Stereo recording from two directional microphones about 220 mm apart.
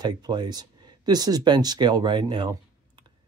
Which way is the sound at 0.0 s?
20° right (ahead or behind).